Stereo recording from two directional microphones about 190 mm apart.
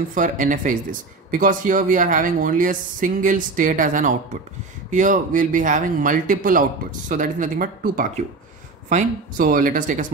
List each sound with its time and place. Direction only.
0.1 s speech: 45° right (ahead or behind)